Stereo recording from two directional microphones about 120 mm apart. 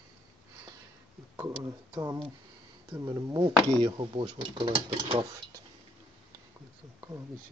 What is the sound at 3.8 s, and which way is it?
Speech, 45° right (ahead or behind).